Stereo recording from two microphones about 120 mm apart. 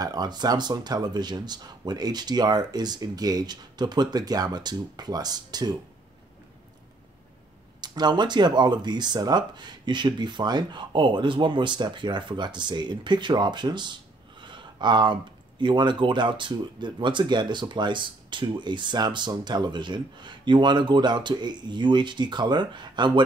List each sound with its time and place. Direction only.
0.0 s speech: 35° right (ahead or behind)
7.8 s speech: 35° right (ahead or behind)
14.4 s a sound: 40° right (ahead or behind)
15.6 s speech: 40° right (ahead or behind)